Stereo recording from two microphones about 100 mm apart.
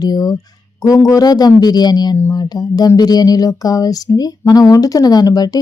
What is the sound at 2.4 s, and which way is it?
Speech, 40° left (ahead or behind).